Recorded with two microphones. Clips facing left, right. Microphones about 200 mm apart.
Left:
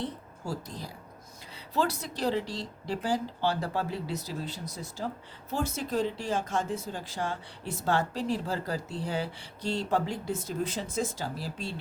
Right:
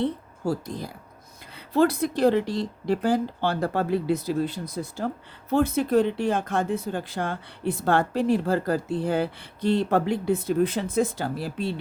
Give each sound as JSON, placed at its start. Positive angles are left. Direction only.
{"t": 0.0, "sound": "speech", "side_deg": -55}